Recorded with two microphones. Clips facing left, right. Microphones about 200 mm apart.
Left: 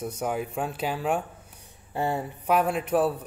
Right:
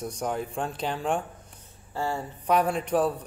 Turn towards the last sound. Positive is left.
turn(degrees=5)  # may be behind; listen again after turning